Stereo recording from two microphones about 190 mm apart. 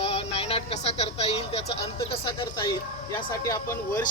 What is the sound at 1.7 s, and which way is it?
Speech, 30° left (ahead or behind).